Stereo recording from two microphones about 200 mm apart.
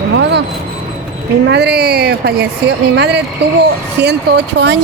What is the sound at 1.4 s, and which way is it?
Speech, 55° right (ahead or behind).